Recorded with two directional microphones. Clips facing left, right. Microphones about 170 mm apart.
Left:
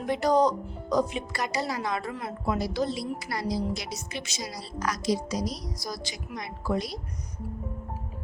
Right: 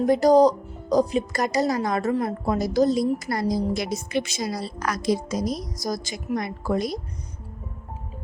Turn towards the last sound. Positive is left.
turn(degrees=-50)  # may be behind; listen again after turning